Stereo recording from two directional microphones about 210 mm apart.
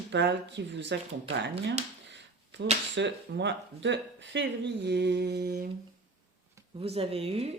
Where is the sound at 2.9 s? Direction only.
55° right (ahead or behind).